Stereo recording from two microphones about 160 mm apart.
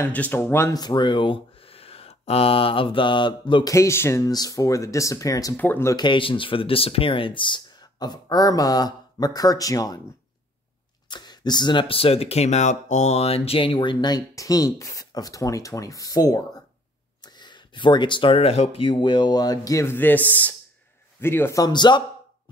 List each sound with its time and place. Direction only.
0.0 s speech: 10° left (ahead or behind); by 3.7 s 30° left (ahead or behind)
3.7 s speech: 15° left (ahead or behind)
5.9 s speech: 30° left (ahead or behind)
11.1 s speech: 25° left (ahead or behind)